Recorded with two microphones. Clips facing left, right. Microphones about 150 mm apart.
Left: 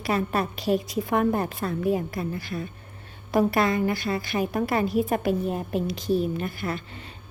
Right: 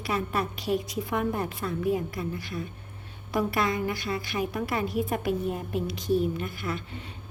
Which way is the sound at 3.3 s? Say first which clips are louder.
Left 5 dB; 35° left (ahead or behind).